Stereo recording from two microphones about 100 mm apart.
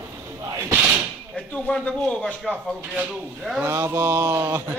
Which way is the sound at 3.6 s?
30° right (ahead or behind).